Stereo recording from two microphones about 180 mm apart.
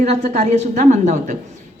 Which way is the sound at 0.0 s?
40° right (ahead or behind).